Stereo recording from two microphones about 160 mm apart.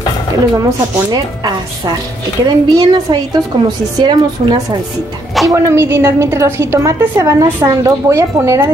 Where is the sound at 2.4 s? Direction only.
25° right (ahead or behind).